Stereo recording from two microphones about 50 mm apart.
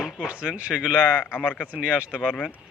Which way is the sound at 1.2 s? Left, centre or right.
Left.